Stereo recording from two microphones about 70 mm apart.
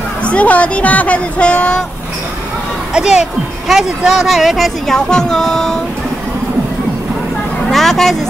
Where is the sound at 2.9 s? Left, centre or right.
Centre.